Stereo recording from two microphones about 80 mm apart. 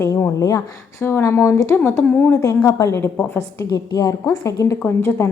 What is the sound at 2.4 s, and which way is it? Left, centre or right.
Speech, left.